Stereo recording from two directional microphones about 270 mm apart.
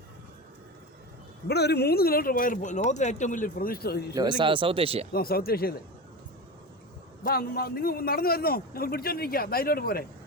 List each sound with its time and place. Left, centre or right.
1.5 s a man's voice: left
4.1 s speech: centre
5.1 s a man's voice: left
7.3 s a man's voice: left